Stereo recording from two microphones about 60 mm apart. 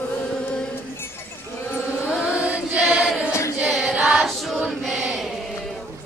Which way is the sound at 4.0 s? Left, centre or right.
Centre.